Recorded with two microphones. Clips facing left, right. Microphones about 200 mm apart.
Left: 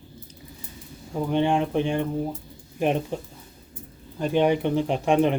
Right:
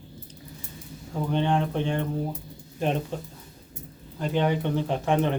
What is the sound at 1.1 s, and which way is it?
Speech, 10° left (ahead or behind).